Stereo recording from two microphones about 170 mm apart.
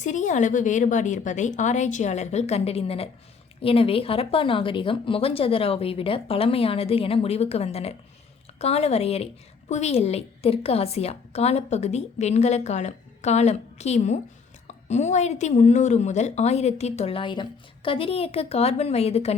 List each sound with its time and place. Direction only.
0.0 s a woman's voice: 45° left (ahead or behind)